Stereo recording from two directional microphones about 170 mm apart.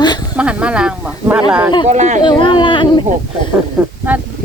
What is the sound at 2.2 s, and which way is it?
Speech, 30° left (ahead or behind).